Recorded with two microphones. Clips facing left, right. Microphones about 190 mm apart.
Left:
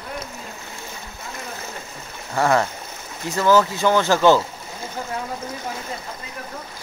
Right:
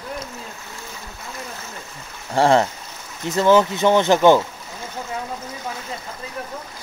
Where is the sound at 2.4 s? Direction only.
25° right (ahead or behind).